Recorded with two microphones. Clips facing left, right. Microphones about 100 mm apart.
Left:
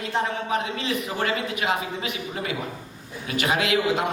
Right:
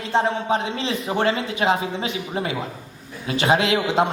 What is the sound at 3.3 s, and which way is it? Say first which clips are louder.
Speech: right 4 dB; 30° right (ahead or behind).